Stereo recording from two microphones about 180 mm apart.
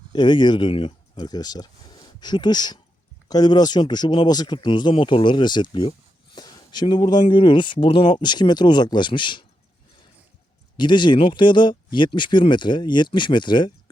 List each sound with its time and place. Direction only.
0.1 s speech: 25° left (ahead or behind)
10.8 s speech: 25° left (ahead or behind)